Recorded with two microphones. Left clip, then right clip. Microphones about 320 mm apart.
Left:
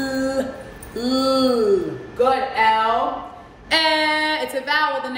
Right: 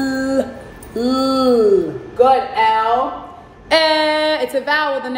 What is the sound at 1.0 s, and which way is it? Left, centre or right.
Speech, centre.